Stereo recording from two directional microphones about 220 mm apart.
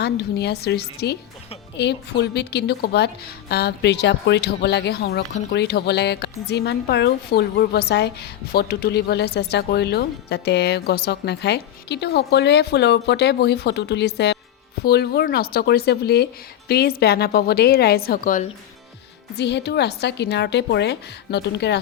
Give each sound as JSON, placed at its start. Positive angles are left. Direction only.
{"t": 0.0, "sound": "a woman's voice", "side_deg": 50}
{"t": 19.4, "sound": "a woman's voice", "side_deg": 50}